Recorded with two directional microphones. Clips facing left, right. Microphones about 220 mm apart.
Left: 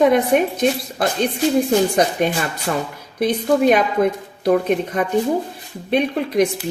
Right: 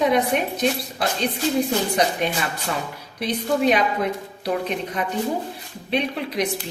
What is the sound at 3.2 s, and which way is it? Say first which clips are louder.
A woman's voice: left 5 dB; 50° left (ahead or behind).